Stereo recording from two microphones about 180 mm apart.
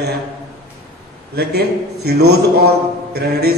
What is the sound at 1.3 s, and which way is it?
Speech, 65° right (ahead or behind).